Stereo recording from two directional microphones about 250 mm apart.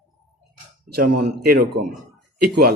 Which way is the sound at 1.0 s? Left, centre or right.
Right.